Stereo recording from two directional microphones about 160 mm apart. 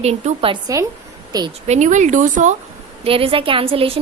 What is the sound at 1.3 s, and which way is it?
Speech, 25° right (ahead or behind).